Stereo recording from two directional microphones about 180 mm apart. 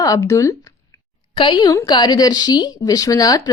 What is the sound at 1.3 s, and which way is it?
Speech, 25° left (ahead or behind).